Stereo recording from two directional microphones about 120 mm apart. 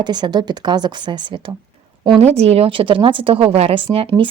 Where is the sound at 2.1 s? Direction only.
60° right (ahead or behind).